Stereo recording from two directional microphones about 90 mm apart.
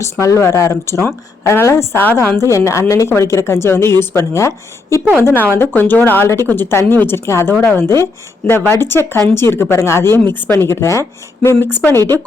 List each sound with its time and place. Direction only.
0.0 s speech: 35° left (ahead or behind)
11.8 s speech: 20° left (ahead or behind)